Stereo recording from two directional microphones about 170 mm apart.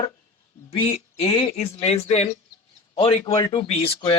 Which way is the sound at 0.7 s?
35° left (ahead or behind).